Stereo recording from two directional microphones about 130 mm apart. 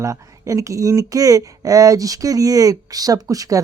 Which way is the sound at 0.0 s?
25° right (ahead or behind).